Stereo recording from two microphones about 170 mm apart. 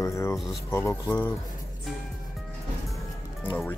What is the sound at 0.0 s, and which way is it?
Music, 15° left (ahead or behind).